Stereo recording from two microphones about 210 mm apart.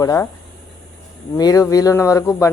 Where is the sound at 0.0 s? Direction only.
15° left (ahead or behind).